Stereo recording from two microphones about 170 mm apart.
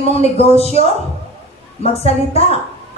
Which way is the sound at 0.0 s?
35° left (ahead or behind).